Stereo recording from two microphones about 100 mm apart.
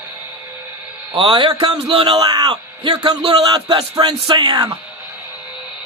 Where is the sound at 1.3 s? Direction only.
60° right (ahead or behind).